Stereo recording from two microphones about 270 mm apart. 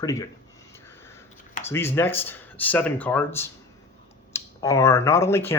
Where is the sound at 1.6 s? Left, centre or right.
Centre.